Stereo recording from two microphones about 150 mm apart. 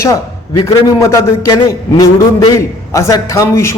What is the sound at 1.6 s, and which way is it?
Speech, 35° left (ahead or behind).